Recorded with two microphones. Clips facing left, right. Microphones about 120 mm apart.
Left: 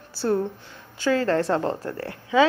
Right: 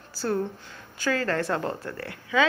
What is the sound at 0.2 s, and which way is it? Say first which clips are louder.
A woman's voice: left 4 dB; 25° left (ahead or behind).